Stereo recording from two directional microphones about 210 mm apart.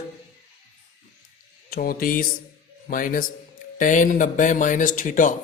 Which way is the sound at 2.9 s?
40° left (ahead or behind).